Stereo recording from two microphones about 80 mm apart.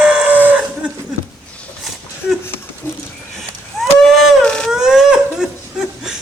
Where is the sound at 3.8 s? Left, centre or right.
Centre.